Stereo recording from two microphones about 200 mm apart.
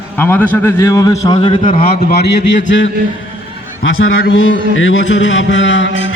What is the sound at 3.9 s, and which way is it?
A man's voice, 75° left (ahead or behind).